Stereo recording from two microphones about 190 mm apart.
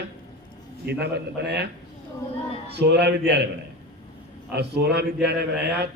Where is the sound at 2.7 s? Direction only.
60° right (ahead or behind).